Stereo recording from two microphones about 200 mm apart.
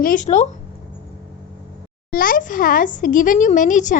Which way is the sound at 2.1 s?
45° left (ahead or behind).